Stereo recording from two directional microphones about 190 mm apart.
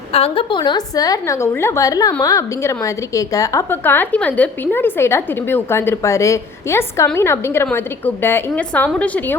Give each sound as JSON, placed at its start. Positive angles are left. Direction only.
{"t": 0.1, "sound": "a woman's voice", "side_deg": 30}